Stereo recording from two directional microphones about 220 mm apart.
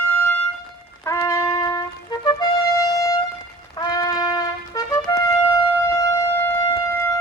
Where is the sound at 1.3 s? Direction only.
15° left (ahead or behind).